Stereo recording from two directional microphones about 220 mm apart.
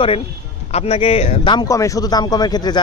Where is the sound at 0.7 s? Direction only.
25° left (ahead or behind).